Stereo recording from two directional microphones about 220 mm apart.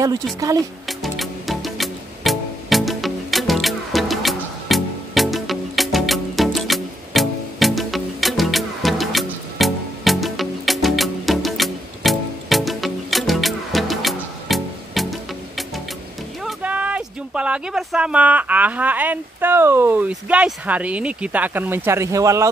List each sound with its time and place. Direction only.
0.0 s speech: 15° right (ahead or behind)
0.8 s music: centre (ahead or behind)
16.4 s speech: 5° right (ahead or behind)